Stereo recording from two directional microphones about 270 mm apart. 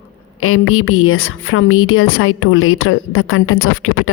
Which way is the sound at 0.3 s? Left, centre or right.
Left.